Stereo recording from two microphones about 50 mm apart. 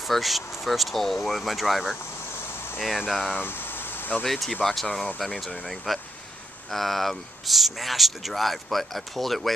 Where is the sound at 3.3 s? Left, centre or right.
Left.